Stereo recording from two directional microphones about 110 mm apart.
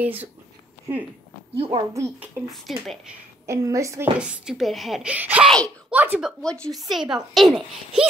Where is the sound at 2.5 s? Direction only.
Centre (ahead or behind).